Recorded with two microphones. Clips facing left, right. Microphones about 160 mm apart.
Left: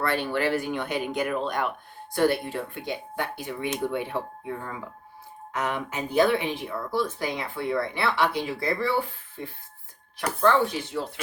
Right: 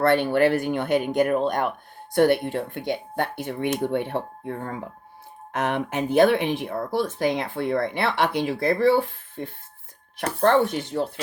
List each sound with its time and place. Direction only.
0.3 s speech: 55° right (ahead or behind)
5.5 s speech: 65° right (ahead or behind)